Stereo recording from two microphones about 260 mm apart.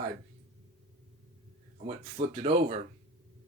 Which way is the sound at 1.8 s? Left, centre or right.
Right.